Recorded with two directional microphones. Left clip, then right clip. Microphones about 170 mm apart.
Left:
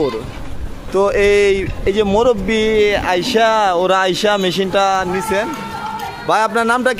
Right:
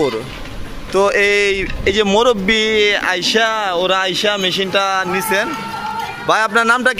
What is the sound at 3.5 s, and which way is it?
Speech, 20° left (ahead or behind).